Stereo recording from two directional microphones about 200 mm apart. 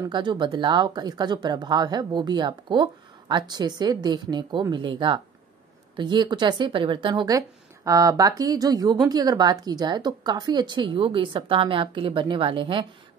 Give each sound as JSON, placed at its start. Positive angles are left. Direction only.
{"t": 0.1, "sound": "speech", "side_deg": -25}